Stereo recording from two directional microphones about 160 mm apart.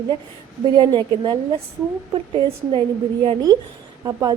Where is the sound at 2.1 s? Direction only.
35° right (ahead or behind).